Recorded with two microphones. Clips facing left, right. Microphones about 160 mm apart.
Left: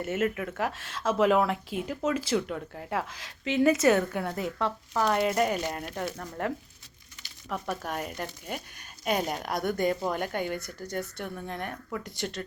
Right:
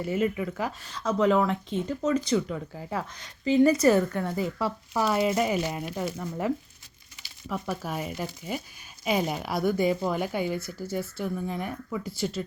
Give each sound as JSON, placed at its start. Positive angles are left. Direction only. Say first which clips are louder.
{"t": 0.0, "sound": "a woman's voice", "louder": "right 2 dB", "side_deg": 0}